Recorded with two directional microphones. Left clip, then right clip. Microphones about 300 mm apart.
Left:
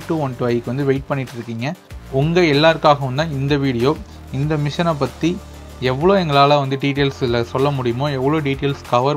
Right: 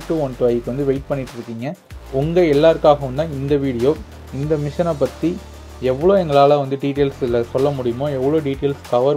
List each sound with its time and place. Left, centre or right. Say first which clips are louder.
0.1 s speech: right 2 dB; left
2.3 s speech: right 1 dB; left